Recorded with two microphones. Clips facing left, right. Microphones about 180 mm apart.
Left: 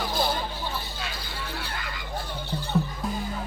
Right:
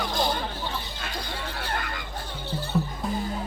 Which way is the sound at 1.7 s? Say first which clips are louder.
Right 5 dB; 50° right (ahead or behind).